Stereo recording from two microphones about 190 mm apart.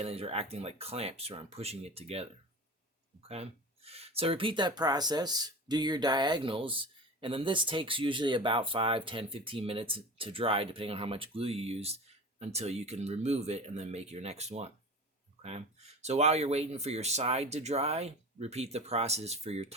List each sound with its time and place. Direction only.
0.0 s speech: 30° right (ahead or behind)